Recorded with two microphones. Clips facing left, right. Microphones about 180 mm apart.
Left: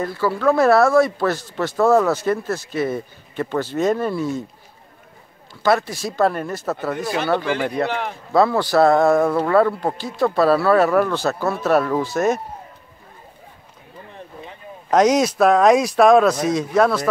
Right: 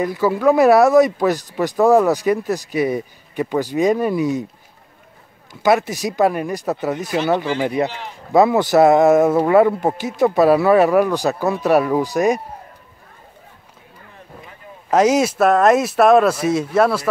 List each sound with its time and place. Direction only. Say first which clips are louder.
0.0 s speech: right 3 dB; 15° right (ahead or behind)
5.5 s speech: right 2 dB; 20° right (ahead or behind)
7.9 s speech: left 8 dB; 55° left (ahead or behind)
8.3 s speech: right 3 dB; 20° right (ahead or behind)
14.9 s speech: right 1 dB; 5° right (ahead or behind)